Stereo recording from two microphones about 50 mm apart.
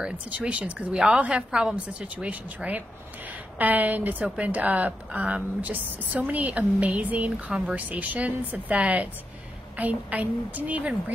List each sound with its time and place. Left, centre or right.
0.0 s speech: right
0.9 s a woman's voice: centre
7.7 s a woman's voice: right